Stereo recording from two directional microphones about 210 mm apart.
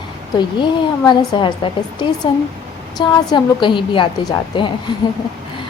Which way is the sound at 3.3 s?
20° left (ahead or behind).